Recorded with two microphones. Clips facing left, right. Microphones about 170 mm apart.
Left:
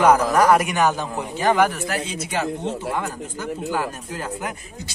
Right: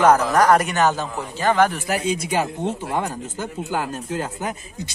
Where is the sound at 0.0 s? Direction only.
10° left (ahead or behind).